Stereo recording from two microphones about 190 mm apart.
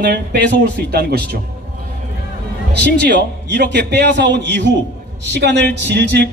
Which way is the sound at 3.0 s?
60° right (ahead or behind).